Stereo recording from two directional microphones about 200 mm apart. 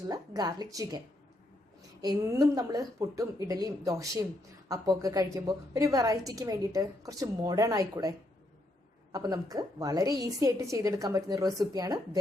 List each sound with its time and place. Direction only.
0.1 s speech: 20° right (ahead or behind)
2.0 s a woman's voice: 20° right (ahead or behind)
9.1 s a woman's voice: 20° right (ahead or behind)